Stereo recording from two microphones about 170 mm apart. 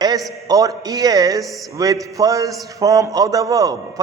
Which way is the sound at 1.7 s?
20° right (ahead or behind).